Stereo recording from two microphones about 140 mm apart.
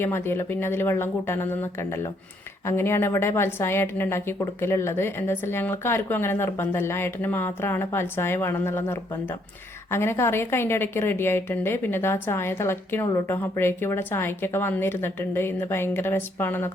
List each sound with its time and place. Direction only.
0.0 s a woman's voice: 15° left (ahead or behind)